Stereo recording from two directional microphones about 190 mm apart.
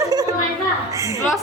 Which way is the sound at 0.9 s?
15° right (ahead or behind).